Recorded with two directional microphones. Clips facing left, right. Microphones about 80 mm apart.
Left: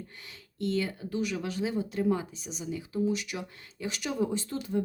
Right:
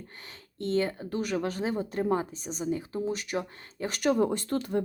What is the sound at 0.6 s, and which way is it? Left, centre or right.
Speech, right.